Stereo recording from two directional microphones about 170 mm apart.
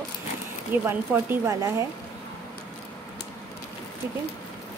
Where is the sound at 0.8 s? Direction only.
15° right (ahead or behind).